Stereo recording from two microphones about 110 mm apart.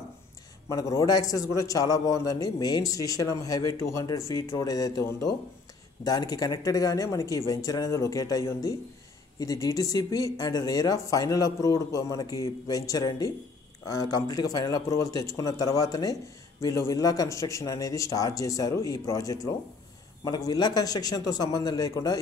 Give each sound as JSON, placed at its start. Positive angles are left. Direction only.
{"t": 0.7, "sound": "a man's voice", "side_deg": 30}